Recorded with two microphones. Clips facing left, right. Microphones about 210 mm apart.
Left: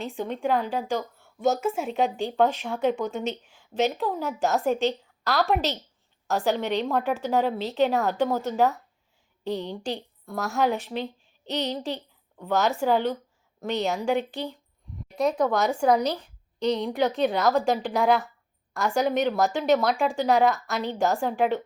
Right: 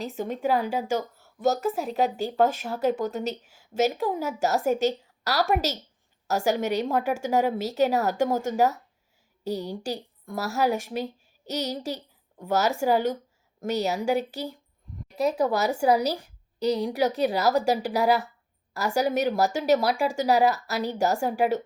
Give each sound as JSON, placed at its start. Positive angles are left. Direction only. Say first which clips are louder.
{"t": 0.0, "sound": "a woman's voice", "louder": "even", "side_deg": -5}
{"t": 8.2, "sound": "speech", "louder": "even", "side_deg": -45}
{"t": 10.2, "sound": "a woman's voice", "louder": "even", "side_deg": 0}
{"t": 10.9, "sound": "a sound", "louder": "right 1 dB", "side_deg": -40}
{"t": 12.4, "sound": "a woman's voice", "louder": "even", "side_deg": -10}